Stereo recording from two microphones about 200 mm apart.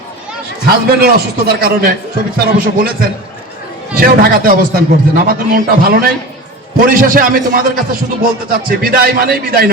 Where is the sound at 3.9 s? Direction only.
45° right (ahead or behind).